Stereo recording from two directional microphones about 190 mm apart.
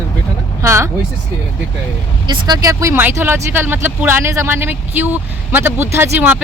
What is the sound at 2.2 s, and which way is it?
Speech, 20° right (ahead or behind).